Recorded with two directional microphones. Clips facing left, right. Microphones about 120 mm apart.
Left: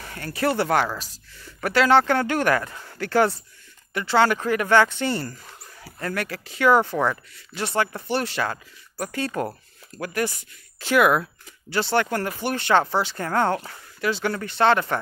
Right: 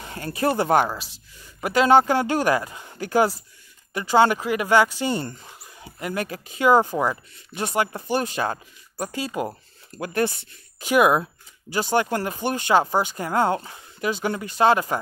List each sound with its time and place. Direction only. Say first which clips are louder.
0.0 s speech: right 1 dB; 20° right (ahead or behind)
9.2 s speech: left 2 dB; 10° right (ahead or behind)